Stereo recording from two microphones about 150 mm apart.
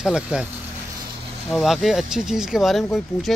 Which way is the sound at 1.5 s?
Centre (ahead or behind).